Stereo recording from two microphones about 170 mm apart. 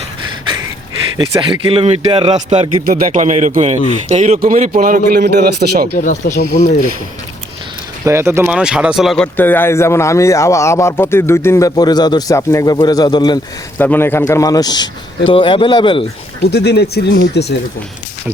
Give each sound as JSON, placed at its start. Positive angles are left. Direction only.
{"t": 1.1, "sound": "speech", "side_deg": -30}
{"t": 2.8, "sound": "a man's voice", "side_deg": -50}
{"t": 6.0, "sound": "speech", "side_deg": 50}
{"t": 8.0, "sound": "speech", "side_deg": -15}
{"t": 13.7, "sound": "speech", "side_deg": 10}
{"t": 16.4, "sound": "speech", "side_deg": 70}